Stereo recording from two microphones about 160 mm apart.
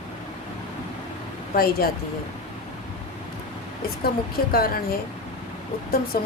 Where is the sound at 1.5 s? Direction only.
70° left (ahead or behind).